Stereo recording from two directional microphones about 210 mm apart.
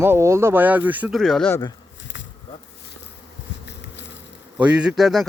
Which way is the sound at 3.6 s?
55° left (ahead or behind).